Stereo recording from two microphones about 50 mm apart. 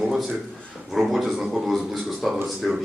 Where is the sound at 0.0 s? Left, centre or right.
Centre.